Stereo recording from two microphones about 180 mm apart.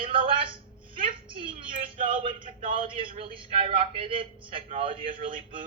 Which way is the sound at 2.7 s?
30° right (ahead or behind).